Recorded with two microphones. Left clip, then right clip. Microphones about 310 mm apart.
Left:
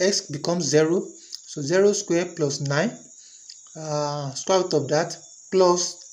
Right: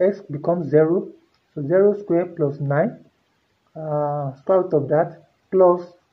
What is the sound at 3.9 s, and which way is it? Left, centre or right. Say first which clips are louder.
Speech: right 4 dB; centre.